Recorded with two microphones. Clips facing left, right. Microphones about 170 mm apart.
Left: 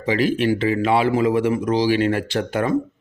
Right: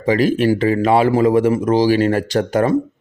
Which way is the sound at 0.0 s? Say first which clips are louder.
Right 4 dB; 45° right (ahead or behind).